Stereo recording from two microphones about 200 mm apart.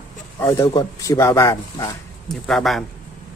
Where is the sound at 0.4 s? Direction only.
15° left (ahead or behind).